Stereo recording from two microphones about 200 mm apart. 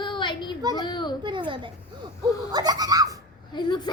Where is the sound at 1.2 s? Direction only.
25° right (ahead or behind).